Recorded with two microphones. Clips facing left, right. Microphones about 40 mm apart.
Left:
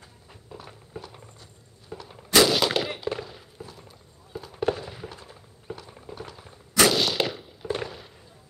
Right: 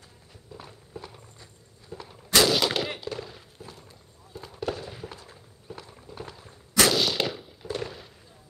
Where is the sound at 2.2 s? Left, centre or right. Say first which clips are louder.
Left 2 dB; centre.